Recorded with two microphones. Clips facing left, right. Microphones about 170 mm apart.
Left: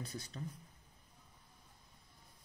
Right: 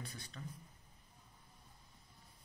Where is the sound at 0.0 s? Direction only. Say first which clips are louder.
Left 5 dB; 40° left (ahead or behind).